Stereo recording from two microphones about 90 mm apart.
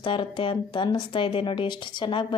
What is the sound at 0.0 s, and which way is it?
Speech, 65° left (ahead or behind).